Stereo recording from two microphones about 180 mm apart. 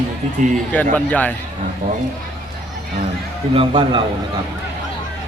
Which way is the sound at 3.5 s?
30° right (ahead or behind).